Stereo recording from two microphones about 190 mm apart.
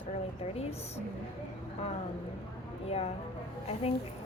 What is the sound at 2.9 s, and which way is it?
Speech, 30° left (ahead or behind).